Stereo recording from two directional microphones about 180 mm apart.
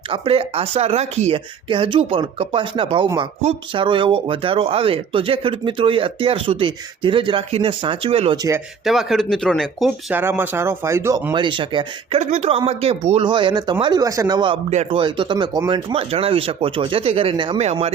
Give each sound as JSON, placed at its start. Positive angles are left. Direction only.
{"t": 0.1, "sound": "speech", "side_deg": -30}
{"t": 8.4, "sound": "speech", "side_deg": -15}
{"t": 8.8, "sound": "speech", "side_deg": 0}
{"t": 10.1, "sound": "speech", "side_deg": -10}
{"t": 12.2, "sound": "speech", "side_deg": -40}